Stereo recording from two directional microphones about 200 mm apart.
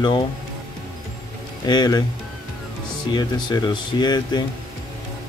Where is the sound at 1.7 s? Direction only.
20° left (ahead or behind).